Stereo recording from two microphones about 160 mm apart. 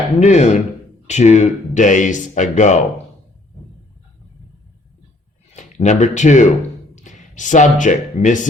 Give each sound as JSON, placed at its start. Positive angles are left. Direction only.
{"t": 0.2, "sound": "speech", "side_deg": 50}
{"t": 5.5, "sound": "speech", "side_deg": 50}